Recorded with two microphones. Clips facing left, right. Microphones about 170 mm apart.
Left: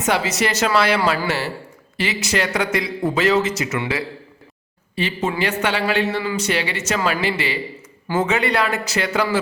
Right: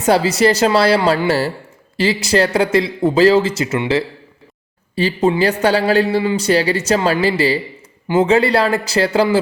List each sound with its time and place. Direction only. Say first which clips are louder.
0.0 s speech: right 7 dB; 35° right (ahead or behind)
8.0 s speech: right 6 dB; 20° right (ahead or behind)
8.3 s speech: right 7 dB; 30° right (ahead or behind)